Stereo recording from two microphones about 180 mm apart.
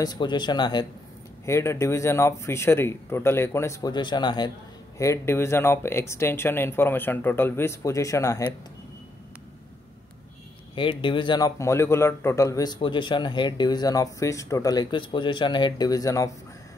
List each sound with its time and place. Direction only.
0.0 s a man's voice: 25° left (ahead or behind)
10.7 s a man's voice: 30° left (ahead or behind)